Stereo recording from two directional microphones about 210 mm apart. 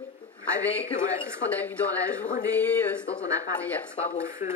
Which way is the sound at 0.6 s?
5° left (ahead or behind).